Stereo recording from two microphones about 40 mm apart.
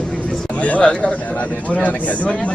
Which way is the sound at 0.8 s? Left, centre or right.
Left.